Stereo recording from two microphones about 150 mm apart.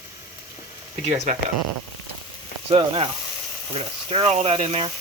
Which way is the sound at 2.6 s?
40° right (ahead or behind).